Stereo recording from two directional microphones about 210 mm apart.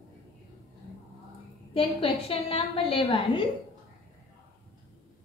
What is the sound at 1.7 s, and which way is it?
A woman's voice, 25° left (ahead or behind).